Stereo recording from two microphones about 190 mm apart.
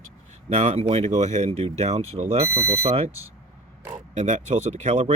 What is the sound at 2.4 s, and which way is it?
Speech, 15° right (ahead or behind).